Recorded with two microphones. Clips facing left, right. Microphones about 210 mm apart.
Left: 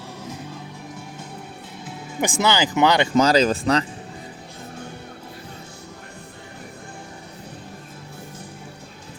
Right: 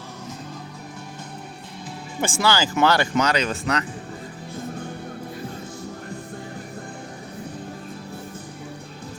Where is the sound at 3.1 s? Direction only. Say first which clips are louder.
Left 5 dB; 35° left (ahead or behind).